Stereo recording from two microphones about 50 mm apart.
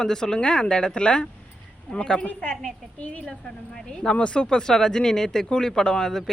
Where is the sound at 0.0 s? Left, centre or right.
Centre.